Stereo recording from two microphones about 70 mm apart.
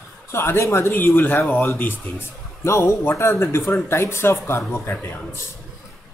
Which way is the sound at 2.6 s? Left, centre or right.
Left.